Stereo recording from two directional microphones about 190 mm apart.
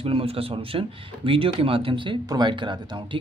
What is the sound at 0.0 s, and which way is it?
Speech, 30° right (ahead or behind).